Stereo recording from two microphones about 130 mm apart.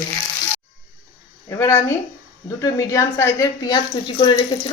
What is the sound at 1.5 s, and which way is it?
A woman's voice, 20° left (ahead or behind).